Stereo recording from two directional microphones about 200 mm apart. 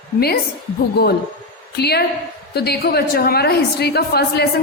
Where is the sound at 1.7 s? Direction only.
55° left (ahead or behind).